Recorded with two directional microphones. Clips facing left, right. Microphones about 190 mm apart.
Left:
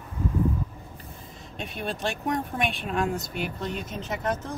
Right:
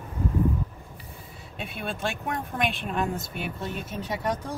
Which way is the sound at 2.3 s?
Centre (ahead or behind).